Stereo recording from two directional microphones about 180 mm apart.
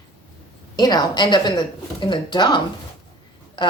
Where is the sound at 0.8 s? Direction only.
20° left (ahead or behind).